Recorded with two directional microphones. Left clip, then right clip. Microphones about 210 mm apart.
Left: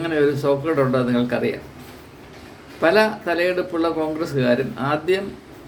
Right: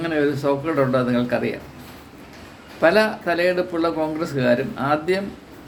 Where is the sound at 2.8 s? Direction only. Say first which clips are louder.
Even; 5° right (ahead or behind).